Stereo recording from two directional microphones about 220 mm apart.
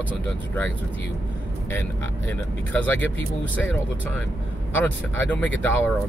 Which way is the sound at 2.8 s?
10° left (ahead or behind).